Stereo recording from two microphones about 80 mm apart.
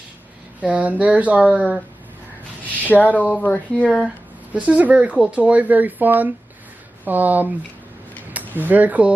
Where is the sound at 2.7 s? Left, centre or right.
Left.